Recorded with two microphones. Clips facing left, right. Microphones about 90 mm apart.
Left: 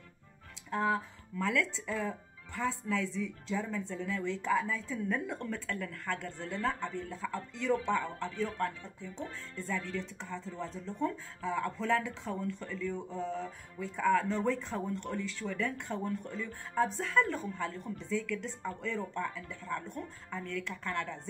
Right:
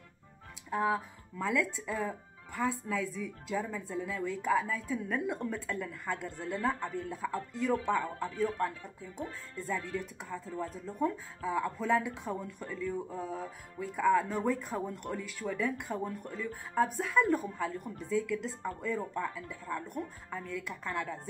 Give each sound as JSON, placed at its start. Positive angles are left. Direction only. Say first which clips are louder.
{"t": 0.7, "sound": "speech", "louder": "right 1 dB", "side_deg": -10}